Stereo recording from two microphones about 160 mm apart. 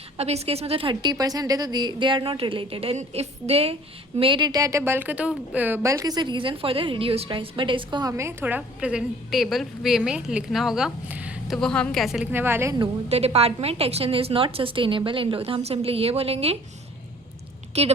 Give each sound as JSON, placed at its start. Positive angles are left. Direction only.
{"t": 0.2, "sound": "a woman's voice", "side_deg": -40}
{"t": 1.1, "sound": "a woman's voice", "side_deg": -25}
{"t": 12.3, "sound": "speech", "side_deg": -15}
{"t": 12.8, "sound": "a woman's voice", "side_deg": -40}
{"t": 17.7, "sound": "a woman's voice", "side_deg": -40}